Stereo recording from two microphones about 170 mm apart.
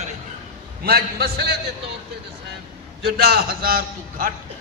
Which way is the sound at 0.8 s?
65° right (ahead or behind).